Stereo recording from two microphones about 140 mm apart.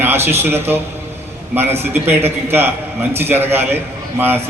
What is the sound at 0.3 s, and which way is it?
A man's voice, 15° right (ahead or behind).